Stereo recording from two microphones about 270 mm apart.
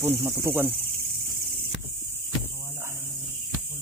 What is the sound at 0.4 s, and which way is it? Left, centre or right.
Cricket, centre.